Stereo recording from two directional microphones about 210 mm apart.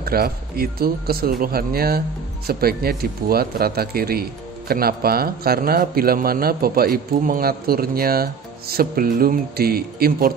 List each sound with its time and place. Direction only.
0.0 s speech: 45° right (ahead or behind)